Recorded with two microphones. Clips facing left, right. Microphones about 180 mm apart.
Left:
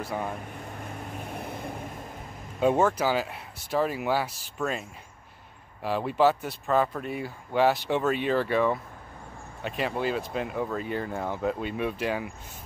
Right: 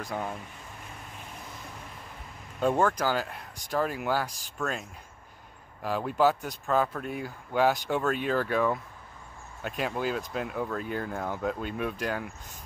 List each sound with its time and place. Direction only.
0.0 s speech: centre (ahead or behind)
1.3 s vehicle: 60° left (ahead or behind)
2.6 s speech: 5° left (ahead or behind)